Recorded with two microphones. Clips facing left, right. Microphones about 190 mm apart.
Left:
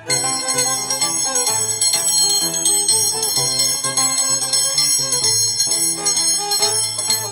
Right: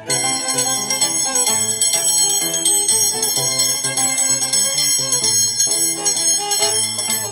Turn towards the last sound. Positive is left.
turn(degrees=-25)  # may be behind; listen again after turning